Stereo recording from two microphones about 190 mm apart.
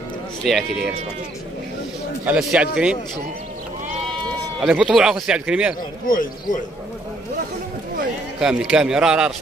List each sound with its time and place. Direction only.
0.4 s a man's voice: centre (ahead or behind)
2.2 s a man's voice: 5° right (ahead or behind)
4.6 s a man's voice: 5° right (ahead or behind)
6.0 s speech: 45° left (ahead or behind)
8.4 s a man's voice: 5° right (ahead or behind)